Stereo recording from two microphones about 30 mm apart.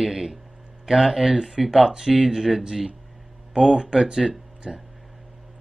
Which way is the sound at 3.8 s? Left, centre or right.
Right.